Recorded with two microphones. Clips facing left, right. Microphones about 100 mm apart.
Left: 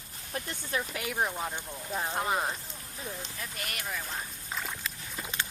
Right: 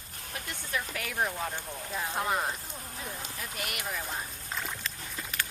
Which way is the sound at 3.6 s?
10° right (ahead or behind).